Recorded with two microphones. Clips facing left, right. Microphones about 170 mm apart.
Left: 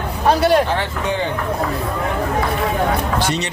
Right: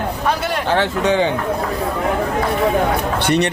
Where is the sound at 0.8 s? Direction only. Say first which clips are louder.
Right 5 dB; 85° right.